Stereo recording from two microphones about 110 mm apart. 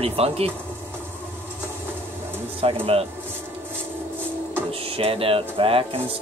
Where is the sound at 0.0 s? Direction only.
60° right (ahead or behind).